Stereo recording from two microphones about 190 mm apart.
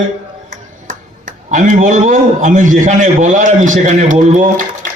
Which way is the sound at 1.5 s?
45° right (ahead or behind).